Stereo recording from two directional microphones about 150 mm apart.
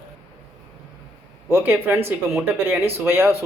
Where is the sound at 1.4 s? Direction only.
15° right (ahead or behind).